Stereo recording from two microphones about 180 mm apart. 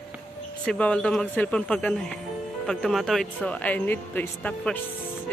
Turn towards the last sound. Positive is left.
turn(degrees=10)  # may be behind; listen again after turning